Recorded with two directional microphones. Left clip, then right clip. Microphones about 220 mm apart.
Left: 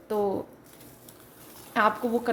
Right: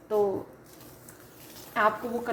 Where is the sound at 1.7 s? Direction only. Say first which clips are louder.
Left 2 dB; 60° left (ahead or behind).